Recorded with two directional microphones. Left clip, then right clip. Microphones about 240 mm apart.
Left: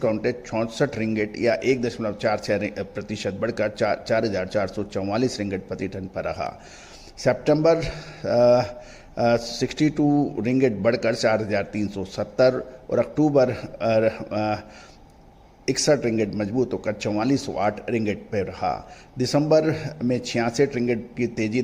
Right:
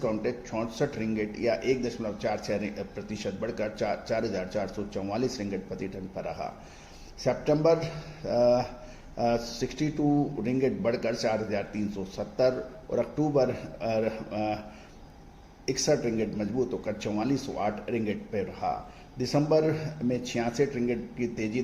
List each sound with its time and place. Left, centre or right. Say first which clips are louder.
0.0 s a man's voice: left 6 dB; left
15.6 s a man's voice: left 6 dB; left